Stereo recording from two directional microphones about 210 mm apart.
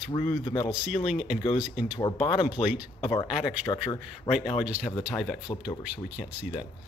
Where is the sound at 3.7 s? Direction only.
20° left (ahead or behind).